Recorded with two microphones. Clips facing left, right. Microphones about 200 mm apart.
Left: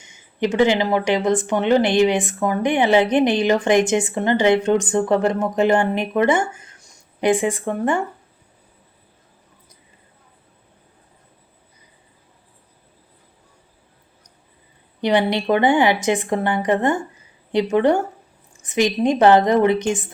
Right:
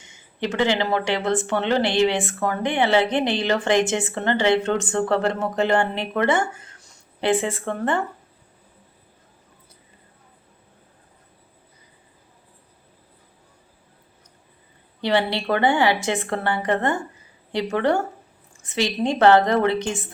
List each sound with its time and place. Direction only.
0.0 s speech: 15° left (ahead or behind)
15.0 s speech: 20° left (ahead or behind)